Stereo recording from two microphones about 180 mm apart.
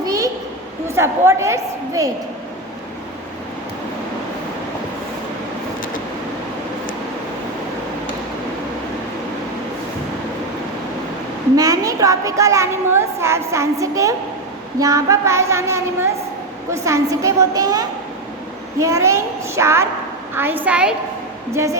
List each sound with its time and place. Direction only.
0.0 s a sound: 20° right (ahead or behind)
0.9 s a woman's voice: 15° right (ahead or behind)
11.5 s a woman's voice: 20° right (ahead or behind)